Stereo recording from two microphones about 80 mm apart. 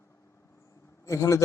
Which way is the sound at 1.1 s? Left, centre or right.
Left.